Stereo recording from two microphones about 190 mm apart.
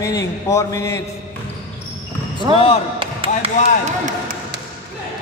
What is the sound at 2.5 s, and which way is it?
Speech, 30° left (ahead or behind).